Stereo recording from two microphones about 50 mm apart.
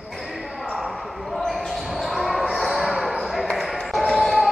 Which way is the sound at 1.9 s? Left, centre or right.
Centre.